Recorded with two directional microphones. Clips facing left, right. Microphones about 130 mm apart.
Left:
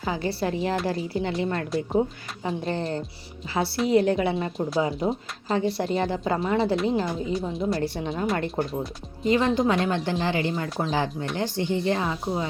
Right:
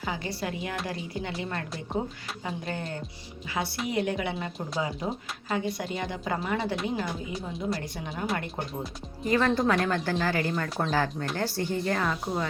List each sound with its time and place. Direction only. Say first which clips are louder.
0.0 s a woman's voice: left 6 dB; 30° left (ahead or behind)